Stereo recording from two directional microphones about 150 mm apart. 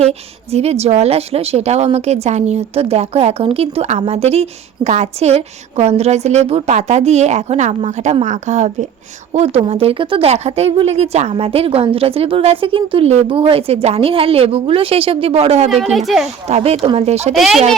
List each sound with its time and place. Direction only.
0.0 s a woman's voice: 45° right (ahead or behind)
15.7 s a woman's voice: centre (ahead or behind)
16.5 s a woman's voice: 45° right (ahead or behind)
17.3 s a woman's voice: centre (ahead or behind)